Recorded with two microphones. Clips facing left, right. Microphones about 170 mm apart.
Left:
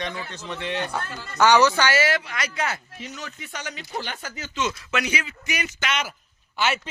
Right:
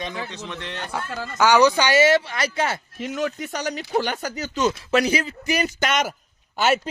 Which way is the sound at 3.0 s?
50° right (ahead or behind).